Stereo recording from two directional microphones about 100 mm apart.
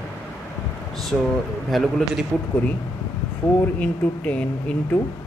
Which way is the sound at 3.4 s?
25° left (ahead or behind).